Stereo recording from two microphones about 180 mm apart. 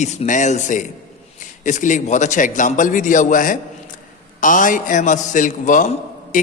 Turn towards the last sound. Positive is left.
turn(degrees=45)  # may be behind; listen again after turning